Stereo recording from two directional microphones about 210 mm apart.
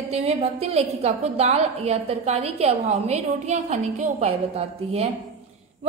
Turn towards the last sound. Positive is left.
turn(degrees=-30)  # may be behind; listen again after turning